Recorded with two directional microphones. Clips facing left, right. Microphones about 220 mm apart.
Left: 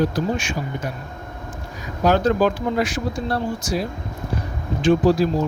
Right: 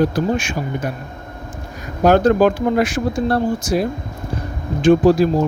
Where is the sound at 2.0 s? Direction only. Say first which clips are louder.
Right 5 dB; 50° right (ahead or behind).